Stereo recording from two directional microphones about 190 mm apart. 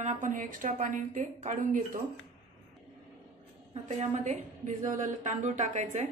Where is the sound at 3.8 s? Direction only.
35° right (ahead or behind).